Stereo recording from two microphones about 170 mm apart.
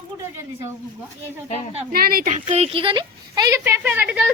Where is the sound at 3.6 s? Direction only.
10° right (ahead or behind).